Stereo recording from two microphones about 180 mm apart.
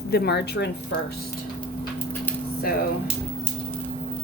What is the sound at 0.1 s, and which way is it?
Speech, 65° left (ahead or behind).